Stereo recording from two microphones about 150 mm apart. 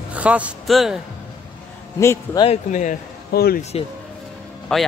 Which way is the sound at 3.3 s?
90° left.